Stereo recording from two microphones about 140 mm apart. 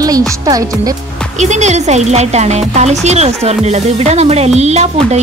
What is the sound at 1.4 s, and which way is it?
Speech, 55° right (ahead or behind).